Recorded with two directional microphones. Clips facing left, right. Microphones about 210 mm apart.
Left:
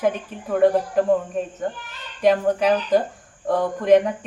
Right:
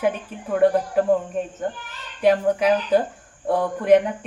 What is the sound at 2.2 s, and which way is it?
A woman's voice, 10° right (ahead or behind).